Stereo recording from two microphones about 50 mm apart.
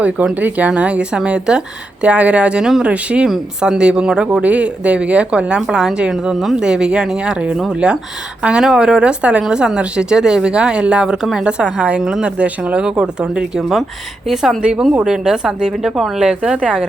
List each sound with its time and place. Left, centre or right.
0.3 s speech: right
5.5 s speech: centre
12.2 s speech: right
13.6 s speech: centre
14.6 s speech: centre